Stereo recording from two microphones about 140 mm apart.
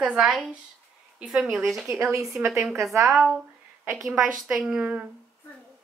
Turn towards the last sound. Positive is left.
turn(degrees=-10)  # may be behind; listen again after turning